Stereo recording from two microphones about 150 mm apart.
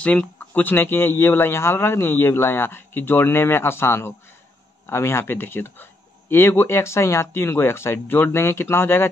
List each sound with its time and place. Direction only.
0.0 s speech: 10° left (ahead or behind)